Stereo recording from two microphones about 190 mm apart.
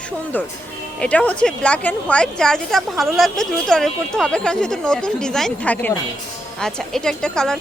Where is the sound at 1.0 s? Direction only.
5° left (ahead or behind).